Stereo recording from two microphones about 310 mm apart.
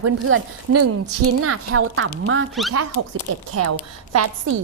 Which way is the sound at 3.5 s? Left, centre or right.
Right.